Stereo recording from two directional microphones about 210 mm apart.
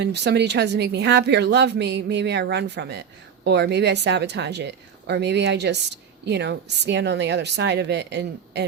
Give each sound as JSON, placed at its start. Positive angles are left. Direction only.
{"t": 0.0, "sound": "a woman's voice", "side_deg": -55}